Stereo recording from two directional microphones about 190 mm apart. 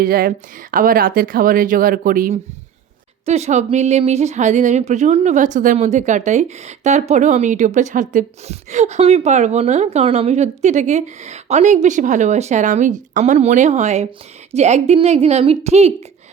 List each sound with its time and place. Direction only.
0.0 s a woman's voice: 50° right (ahead or behind)
3.2 s a woman's voice: 35° right (ahead or behind)